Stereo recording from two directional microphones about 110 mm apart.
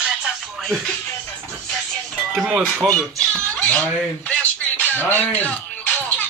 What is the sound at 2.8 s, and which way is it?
Speech, 10° left (ahead or behind).